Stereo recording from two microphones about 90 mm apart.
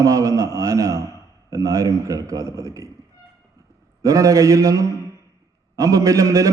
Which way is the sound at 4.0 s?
35° right (ahead or behind).